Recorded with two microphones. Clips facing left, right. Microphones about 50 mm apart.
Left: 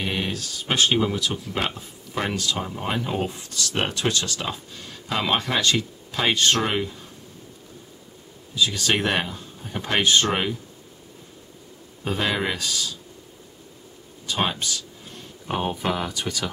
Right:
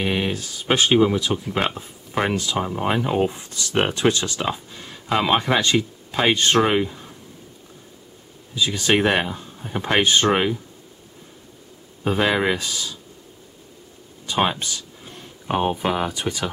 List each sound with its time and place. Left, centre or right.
0.0 s speech: centre
1.4 s speech: right
8.5 s speech: centre
12.0 s speech: centre
14.2 s speech: centre